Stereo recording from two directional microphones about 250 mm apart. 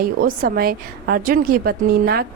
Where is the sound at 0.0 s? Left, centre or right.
Right.